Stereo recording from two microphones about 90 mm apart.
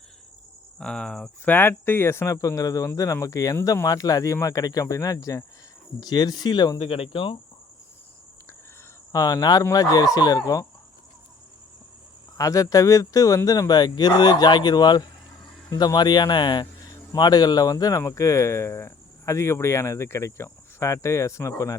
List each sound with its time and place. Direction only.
0.8 s cricket: 10° left (ahead or behind)
1.5 s speech: 25° left (ahead or behind)
6.0 s speech: 50° left (ahead or behind)
6.8 s speech: 90° left
9.1 s speech: 40° left (ahead or behind)
12.4 s speech: 40° left (ahead or behind)